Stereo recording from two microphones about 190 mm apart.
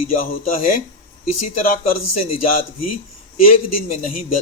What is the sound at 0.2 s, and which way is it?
A man's voice, 45° left (ahead or behind).